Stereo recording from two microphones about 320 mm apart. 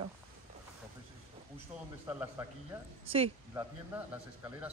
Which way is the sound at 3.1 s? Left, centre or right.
Centre.